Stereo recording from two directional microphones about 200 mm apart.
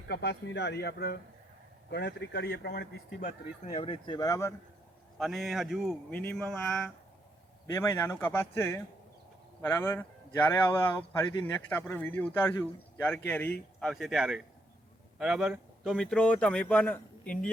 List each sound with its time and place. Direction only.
0.1 s speech: 60° left (ahead or behind)
3.8 s speech: 30° left (ahead or behind)
5.1 s speech: centre (ahead or behind)
7.7 s speech: 15° left (ahead or behind)